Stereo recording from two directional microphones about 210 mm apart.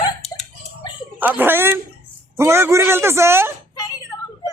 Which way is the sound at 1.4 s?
10° right (ahead or behind).